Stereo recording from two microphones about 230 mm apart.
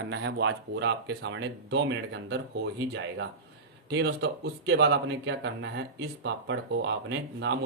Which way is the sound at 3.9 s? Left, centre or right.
Right.